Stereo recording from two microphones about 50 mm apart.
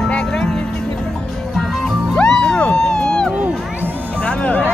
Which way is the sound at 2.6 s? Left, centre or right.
Centre.